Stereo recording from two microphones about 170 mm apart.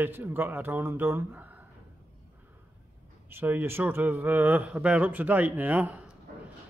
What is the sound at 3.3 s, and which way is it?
Speech, 10° right (ahead or behind).